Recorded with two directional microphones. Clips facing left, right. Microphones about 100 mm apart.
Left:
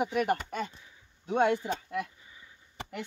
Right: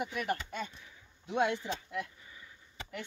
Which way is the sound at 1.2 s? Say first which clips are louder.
Left 5 dB; 45° left (ahead or behind).